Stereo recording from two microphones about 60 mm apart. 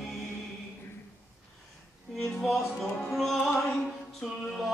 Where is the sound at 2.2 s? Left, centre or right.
Centre.